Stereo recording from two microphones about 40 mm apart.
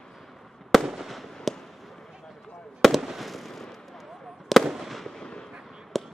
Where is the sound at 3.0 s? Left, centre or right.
Centre.